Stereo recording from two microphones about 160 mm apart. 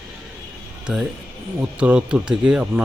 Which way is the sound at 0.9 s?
5° right (ahead or behind).